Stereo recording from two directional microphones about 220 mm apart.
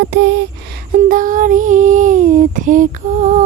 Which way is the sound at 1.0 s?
40° right (ahead or behind).